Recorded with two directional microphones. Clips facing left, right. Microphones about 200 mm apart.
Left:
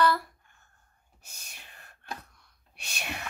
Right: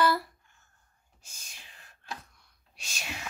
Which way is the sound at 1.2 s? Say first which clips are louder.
Left 2 dB; 60° left (ahead or behind).